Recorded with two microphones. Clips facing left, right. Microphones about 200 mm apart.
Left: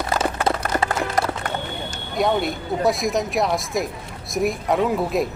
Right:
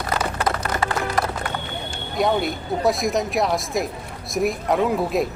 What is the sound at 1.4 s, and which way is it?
Boat, 45° left (ahead or behind).